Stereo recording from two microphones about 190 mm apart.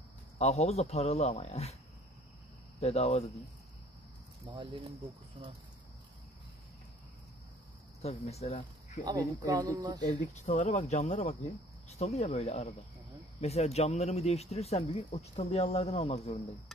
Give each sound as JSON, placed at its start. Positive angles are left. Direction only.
{"t": 0.4, "sound": "speech", "side_deg": 35}
{"t": 2.8, "sound": "speech", "side_deg": 35}
{"t": 4.5, "sound": "speech", "side_deg": -25}
{"t": 8.0, "sound": "speech", "side_deg": 35}
{"t": 9.0, "sound": "speech", "side_deg": -20}
{"t": 10.4, "sound": "speech", "side_deg": 40}